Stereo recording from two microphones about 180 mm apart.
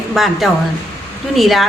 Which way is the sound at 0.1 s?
Centre (ahead or behind).